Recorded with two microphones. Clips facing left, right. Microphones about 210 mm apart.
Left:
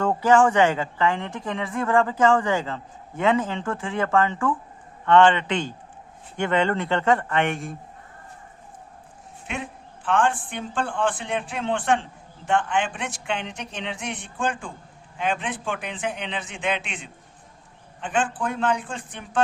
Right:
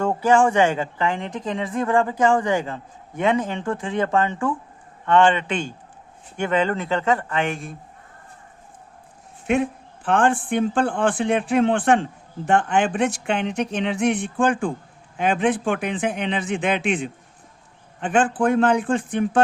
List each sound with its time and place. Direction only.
0.0 s speech: 10° right (ahead or behind)
9.5 s speech: 50° right (ahead or behind)